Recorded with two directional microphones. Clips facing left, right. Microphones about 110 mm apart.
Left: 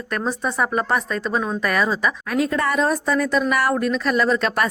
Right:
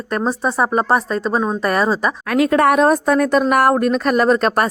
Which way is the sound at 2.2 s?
70° right (ahead or behind).